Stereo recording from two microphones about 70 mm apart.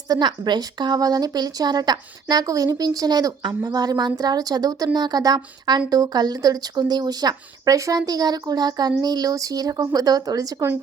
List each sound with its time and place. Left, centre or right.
0.1 s speech: right
4.9 s speech: right